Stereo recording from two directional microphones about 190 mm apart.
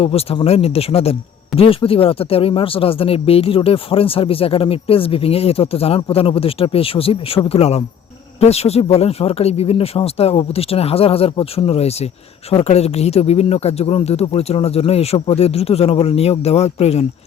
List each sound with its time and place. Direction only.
0.0 s speech: 30° left (ahead or behind)